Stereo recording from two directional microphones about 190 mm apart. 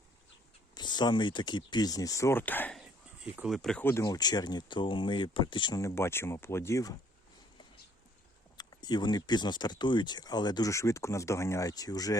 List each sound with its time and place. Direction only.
0.7 s speech: 25° left (ahead or behind)
2.8 s speech: 5° right (ahead or behind); by 6.9 s 15° left (ahead or behind)
8.5 s speech: 20° left (ahead or behind)